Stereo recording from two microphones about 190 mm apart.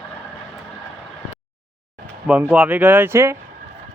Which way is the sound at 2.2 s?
10° right (ahead or behind).